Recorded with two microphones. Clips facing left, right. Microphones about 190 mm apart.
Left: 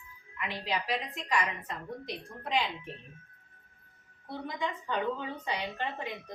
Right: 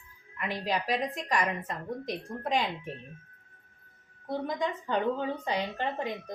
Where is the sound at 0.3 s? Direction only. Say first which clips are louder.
Right 3 dB; 45° right (ahead or behind).